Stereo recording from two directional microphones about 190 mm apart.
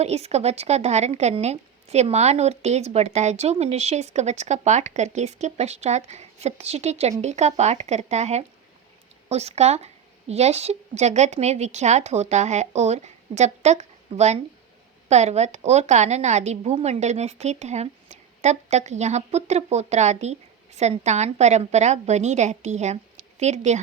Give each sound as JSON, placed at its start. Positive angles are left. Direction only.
{"t": 0.0, "sound": "a woman's voice", "side_deg": -35}